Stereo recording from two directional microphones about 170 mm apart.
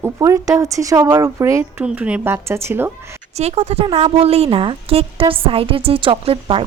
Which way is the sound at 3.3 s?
40° right (ahead or behind).